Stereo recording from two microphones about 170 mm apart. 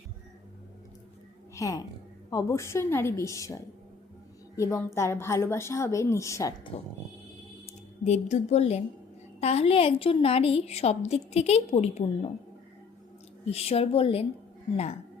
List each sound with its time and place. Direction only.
1.5 s a woman's voice: 20° left (ahead or behind)
6.7 s a woman's voice: 35° left (ahead or behind)
13.4 s a woman's voice: 35° left (ahead or behind)